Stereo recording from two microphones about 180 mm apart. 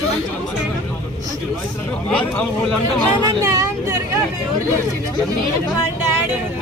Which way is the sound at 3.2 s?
20° right (ahead or behind).